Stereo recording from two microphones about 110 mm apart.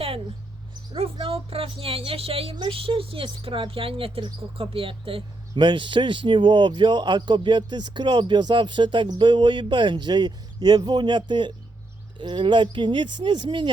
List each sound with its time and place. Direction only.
1.2 s speech: 60° right (ahead or behind)